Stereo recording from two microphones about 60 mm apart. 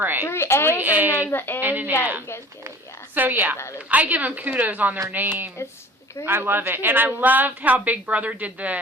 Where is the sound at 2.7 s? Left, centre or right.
Right.